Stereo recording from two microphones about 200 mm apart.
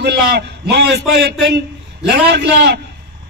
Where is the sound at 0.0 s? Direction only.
55° right (ahead or behind).